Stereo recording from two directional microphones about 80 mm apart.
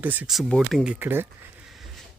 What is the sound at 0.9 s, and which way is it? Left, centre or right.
Speech, right.